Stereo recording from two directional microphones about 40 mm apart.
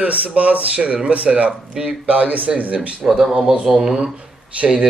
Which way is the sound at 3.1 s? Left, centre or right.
Centre.